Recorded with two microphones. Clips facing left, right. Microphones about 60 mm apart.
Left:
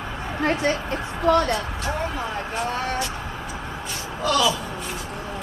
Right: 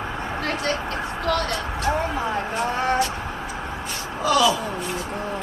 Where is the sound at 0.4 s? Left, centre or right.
Left.